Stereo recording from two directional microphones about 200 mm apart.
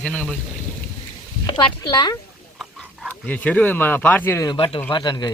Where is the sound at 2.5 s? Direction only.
Centre (ahead or behind).